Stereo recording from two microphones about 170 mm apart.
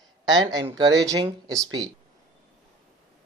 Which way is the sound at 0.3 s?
25° right (ahead or behind).